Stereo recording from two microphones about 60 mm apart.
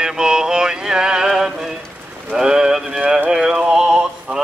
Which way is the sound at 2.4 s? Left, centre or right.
Centre.